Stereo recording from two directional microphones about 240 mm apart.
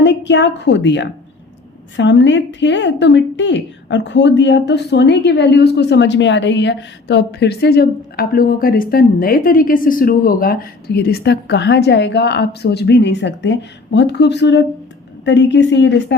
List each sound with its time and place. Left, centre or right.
0.0 s a woman's voice: left